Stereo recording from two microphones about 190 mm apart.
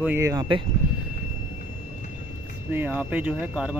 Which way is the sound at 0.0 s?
15° right (ahead or behind).